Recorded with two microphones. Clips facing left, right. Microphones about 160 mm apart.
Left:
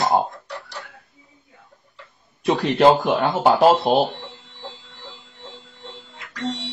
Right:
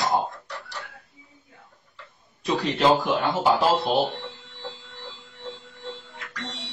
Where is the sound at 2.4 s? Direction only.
55° left (ahead or behind).